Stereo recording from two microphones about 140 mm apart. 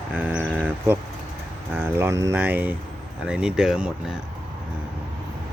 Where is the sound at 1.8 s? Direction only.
15° right (ahead or behind).